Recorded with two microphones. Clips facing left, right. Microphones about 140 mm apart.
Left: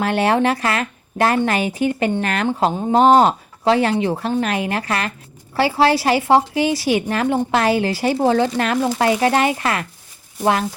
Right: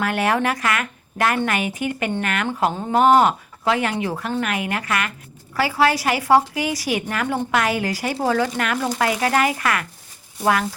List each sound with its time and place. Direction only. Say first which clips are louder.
0.0 s a woman's voice: left 4 dB; 30° left (ahead or behind)